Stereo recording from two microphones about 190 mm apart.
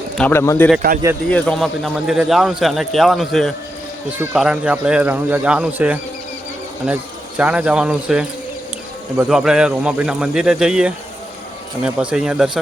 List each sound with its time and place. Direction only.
0.2 s a man's voice: 10° left (ahead or behind); by 12.5 s 5° right (ahead or behind)